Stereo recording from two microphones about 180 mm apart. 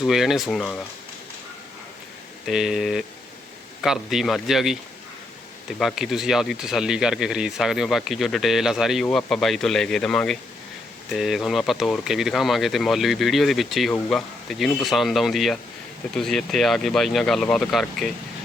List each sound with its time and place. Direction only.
0.0 s speech: centre (ahead or behind)
2.5 s speech: centre (ahead or behind)